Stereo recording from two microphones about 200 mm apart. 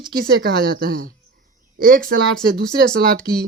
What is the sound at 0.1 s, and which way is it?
Speech, 45° right (ahead or behind).